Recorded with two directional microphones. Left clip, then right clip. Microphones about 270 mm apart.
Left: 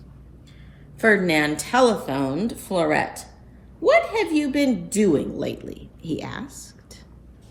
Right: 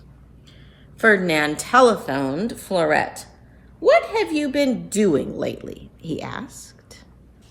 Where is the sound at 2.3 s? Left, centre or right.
Right.